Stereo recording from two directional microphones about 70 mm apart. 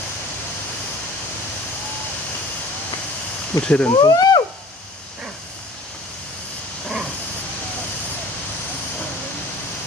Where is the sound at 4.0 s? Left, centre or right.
Left.